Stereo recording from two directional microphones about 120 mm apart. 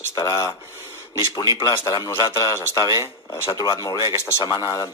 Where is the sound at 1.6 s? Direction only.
30° left (ahead or behind).